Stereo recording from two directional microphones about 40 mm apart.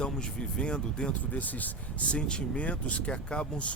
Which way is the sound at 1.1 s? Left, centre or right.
Left.